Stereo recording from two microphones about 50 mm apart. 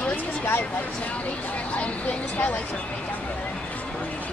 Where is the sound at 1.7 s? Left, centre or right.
Left.